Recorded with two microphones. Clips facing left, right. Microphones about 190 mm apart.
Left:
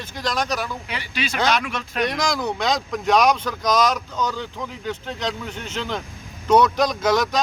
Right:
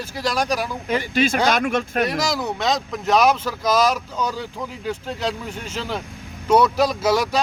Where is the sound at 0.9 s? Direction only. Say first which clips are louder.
Right 9 dB; 45° right (ahead or behind).